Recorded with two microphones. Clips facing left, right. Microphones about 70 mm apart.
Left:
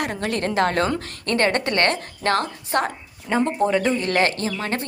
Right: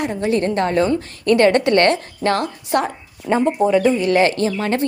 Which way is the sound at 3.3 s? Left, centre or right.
Centre.